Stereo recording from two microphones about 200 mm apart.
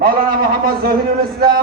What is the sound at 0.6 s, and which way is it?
Speech, 45° right (ahead or behind).